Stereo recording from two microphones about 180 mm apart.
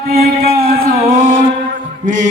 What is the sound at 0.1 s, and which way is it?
Music, 60° right (ahead or behind).